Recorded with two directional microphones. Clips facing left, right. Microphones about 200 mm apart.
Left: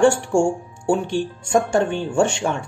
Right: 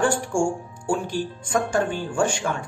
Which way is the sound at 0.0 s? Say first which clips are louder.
Left 6 dB; 25° left (ahead or behind).